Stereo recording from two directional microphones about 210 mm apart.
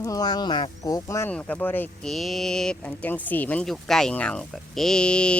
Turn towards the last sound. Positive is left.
turn(degrees=5)  # may be behind; listen again after turning